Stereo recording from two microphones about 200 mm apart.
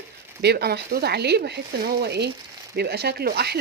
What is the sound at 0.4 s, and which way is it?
Speech, 55° right (ahead or behind).